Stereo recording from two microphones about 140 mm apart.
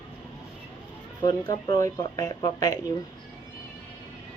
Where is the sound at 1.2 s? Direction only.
30° left (ahead or behind).